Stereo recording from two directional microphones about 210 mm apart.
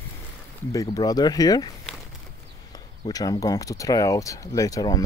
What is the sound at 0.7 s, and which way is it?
Speech, 15° left (ahead or behind).